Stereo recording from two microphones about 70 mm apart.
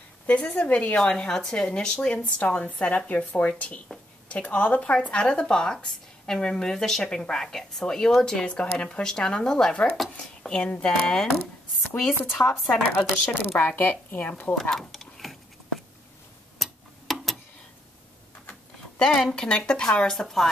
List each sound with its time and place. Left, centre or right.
0.3 s a woman's voice: centre
4.9 s a woman's voice: centre
11.9 s speech: left
12.4 s a woman's voice: centre
13.5 s speech: left
14.5 s a sound: centre
16.5 s tick-tock: centre
18.9 s a woman's voice: centre